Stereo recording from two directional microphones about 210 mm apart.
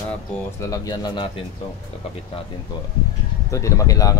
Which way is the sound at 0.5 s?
15° left (ahead or behind).